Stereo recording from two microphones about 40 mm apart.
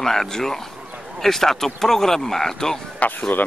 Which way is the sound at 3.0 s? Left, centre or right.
Left.